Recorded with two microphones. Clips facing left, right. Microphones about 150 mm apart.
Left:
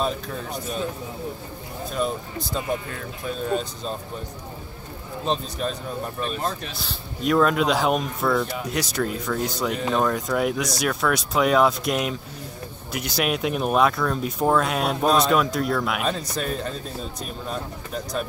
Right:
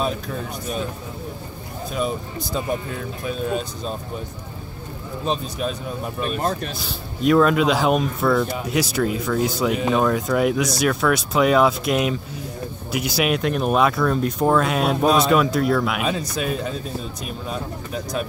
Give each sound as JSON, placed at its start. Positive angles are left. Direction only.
{"t": 1.9, "sound": "speech", "side_deg": -10}
{"t": 5.2, "sound": "speech", "side_deg": -5}
{"t": 6.2, "sound": "speech", "side_deg": -50}
{"t": 6.8, "sound": "speech", "side_deg": 0}